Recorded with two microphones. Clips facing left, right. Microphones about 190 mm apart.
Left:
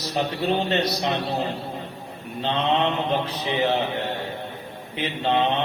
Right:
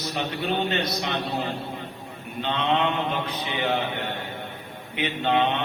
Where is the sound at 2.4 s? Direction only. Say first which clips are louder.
Left 2 dB; 35° left (ahead or behind).